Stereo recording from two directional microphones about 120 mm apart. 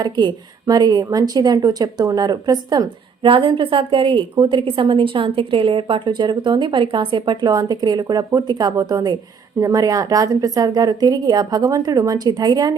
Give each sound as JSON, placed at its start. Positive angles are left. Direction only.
{"t": 0.0, "sound": "a woman's voice", "side_deg": -35}